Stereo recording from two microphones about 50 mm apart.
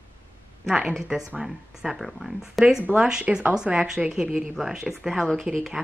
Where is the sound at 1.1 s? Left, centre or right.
Centre.